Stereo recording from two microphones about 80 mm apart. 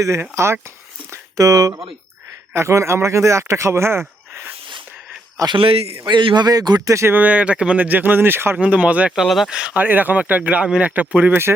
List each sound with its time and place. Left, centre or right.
0.2 s speech: right
1.1 s speech: right
2.5 s speech: right
5.4 s a man's voice: right
6.1 s a man's voice: right
7.1 s speech: centre
8.5 s speech: centre
9.1 s speech: centre; by 11.5 s right